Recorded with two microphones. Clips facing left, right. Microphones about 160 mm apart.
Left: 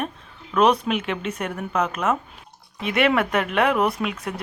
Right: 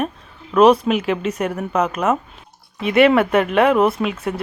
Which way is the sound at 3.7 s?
25° right (ahead or behind).